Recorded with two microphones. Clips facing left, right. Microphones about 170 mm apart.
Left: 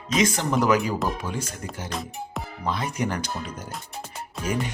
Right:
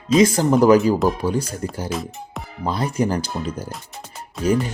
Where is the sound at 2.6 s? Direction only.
35° right (ahead or behind).